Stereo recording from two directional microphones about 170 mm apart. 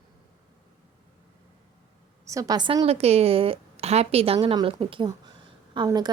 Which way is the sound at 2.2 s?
20° right (ahead or behind).